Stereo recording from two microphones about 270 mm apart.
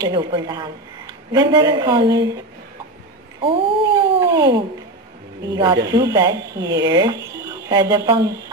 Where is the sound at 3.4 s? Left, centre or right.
Centre.